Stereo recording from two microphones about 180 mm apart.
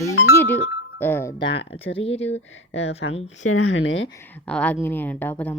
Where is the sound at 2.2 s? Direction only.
90° left.